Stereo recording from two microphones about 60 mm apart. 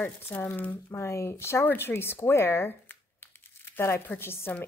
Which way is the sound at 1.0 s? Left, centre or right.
Left.